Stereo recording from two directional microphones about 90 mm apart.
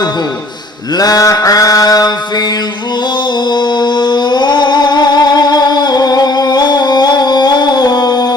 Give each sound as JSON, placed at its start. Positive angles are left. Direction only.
{"t": 0.9, "sound": "mantra", "side_deg": 45}
{"t": 3.5, "sound": "music", "side_deg": 55}